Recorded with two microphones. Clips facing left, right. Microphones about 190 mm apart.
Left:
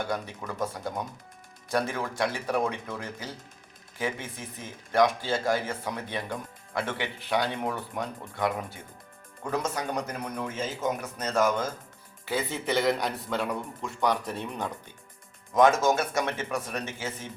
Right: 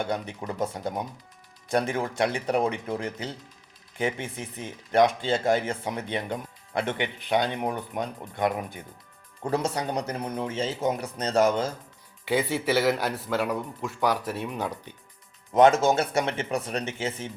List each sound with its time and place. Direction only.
0.0 s speech: 20° right (ahead or behind)
9.4 s a man's voice: 30° right (ahead or behind)
12.2 s a man's voice: 15° right (ahead or behind)
15.5 s speech: 30° right (ahead or behind)